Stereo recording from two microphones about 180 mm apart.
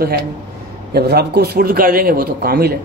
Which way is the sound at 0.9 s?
65° right (ahead or behind).